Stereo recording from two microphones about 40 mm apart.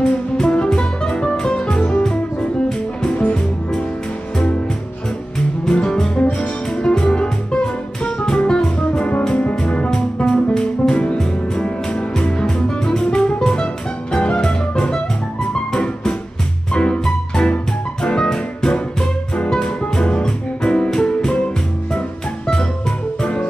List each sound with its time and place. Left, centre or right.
0.0 s music: left
5.7 s music: centre
9.3 s music: left
9.8 s music: left